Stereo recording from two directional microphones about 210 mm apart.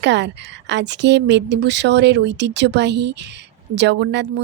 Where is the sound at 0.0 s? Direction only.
55° right (ahead or behind).